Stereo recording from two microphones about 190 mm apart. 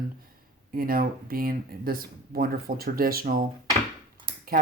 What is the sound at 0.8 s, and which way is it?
Speech, 50° right (ahead or behind).